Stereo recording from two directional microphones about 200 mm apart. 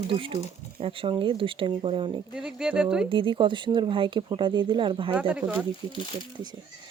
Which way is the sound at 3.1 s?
25° right (ahead or behind).